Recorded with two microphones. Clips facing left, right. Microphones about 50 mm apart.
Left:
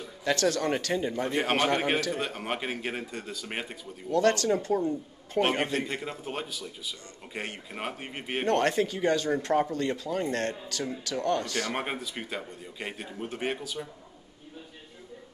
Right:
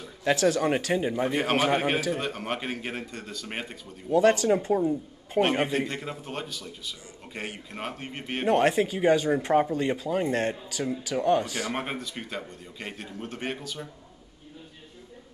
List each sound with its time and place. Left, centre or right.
0.2 s speech: centre
1.4 s a man's voice: centre
4.1 s speech: centre
5.4 s a man's voice: centre
5.9 s a man's voice: centre
8.5 s speech: centre
11.7 s a man's voice: centre